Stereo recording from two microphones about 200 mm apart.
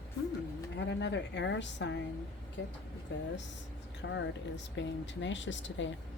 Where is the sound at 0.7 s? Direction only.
60° left (ahead or behind).